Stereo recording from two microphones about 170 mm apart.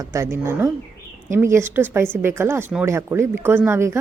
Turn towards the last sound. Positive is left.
turn(degrees=-15)  # may be behind; listen again after turning